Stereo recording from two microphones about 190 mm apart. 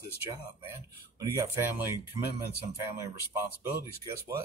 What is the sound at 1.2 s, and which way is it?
Speech, 15° right (ahead or behind).